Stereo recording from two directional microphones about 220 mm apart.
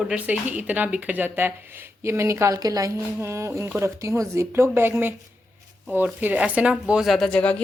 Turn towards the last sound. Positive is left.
turn(degrees=5)  # may be behind; listen again after turning